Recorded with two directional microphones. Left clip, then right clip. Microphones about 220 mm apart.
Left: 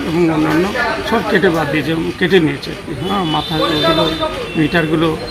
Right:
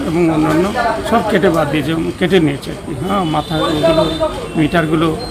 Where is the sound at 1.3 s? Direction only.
20° right (ahead or behind).